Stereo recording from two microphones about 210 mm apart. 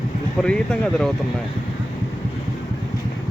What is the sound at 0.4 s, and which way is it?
Speech, 5° left (ahead or behind).